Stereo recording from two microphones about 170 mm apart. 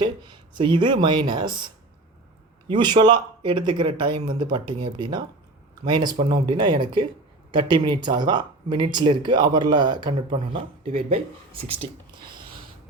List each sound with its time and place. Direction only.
0.0 s speech: 25° right (ahead or behind)